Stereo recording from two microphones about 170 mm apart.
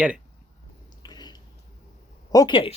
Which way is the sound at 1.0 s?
25° left (ahead or behind).